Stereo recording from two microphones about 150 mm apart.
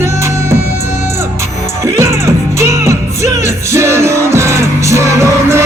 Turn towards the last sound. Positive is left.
turn(degrees=-20)  # may be behind; listen again after turning